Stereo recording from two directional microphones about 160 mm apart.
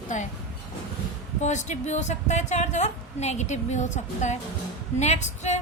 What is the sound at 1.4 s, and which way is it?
A woman's voice, 45° left (ahead or behind).